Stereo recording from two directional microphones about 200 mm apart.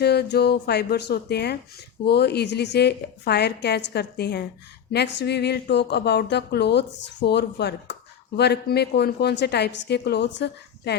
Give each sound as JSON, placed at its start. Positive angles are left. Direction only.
{"t": 0.0, "sound": "speech", "side_deg": 55}